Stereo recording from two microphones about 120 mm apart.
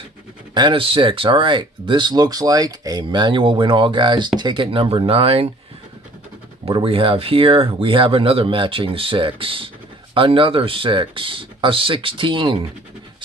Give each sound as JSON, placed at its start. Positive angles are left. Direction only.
{"t": 0.6, "sound": "speech", "side_deg": -45}
{"t": 6.6, "sound": "speech", "side_deg": -50}